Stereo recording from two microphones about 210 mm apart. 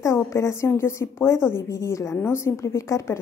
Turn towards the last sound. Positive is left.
turn(degrees=15)  # may be behind; listen again after turning